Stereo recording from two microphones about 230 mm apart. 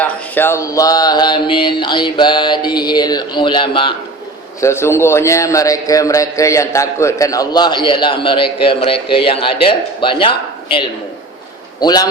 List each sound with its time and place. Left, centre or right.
0.0 s mantra: centre
4.6 s a man's voice: centre
8.6 s mantra: left
11.8 s a man's voice: centre